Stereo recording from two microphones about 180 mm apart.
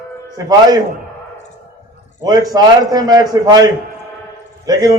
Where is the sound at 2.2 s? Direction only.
20° right (ahead or behind).